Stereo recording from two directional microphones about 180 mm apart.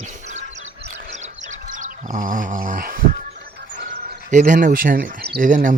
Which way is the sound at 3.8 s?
50° right (ahead or behind).